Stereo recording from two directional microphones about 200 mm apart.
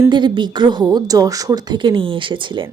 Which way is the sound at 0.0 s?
20° right (ahead or behind).